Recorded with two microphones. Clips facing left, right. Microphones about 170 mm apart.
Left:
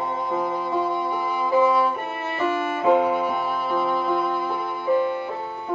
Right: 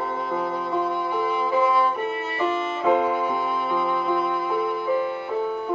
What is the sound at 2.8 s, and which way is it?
Music, 5° left (ahead or behind).